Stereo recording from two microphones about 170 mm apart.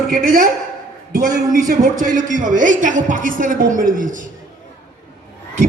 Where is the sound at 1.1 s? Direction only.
55° right (ahead or behind).